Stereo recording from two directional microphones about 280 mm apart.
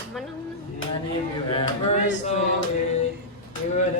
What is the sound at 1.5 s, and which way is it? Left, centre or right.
Speech, centre.